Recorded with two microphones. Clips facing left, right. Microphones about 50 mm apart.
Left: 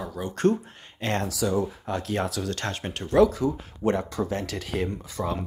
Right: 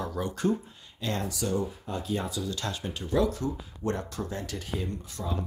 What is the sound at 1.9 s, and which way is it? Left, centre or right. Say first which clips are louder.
Speech: left 3 dB; left.